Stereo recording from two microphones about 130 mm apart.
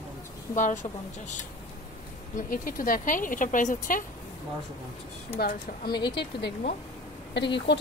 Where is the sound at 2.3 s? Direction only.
90° left.